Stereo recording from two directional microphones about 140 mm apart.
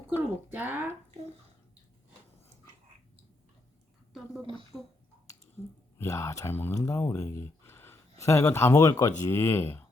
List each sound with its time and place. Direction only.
0.2 s speech: 15° right (ahead or behind)
4.7 s speech: centre (ahead or behind)
6.0 s speech: 20° left (ahead or behind)